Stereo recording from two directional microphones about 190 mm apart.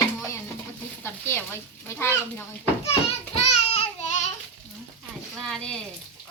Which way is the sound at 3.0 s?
30° left (ahead or behind).